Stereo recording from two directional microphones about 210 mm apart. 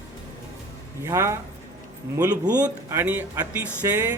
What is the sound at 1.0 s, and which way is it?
Speech, 15° right (ahead or behind).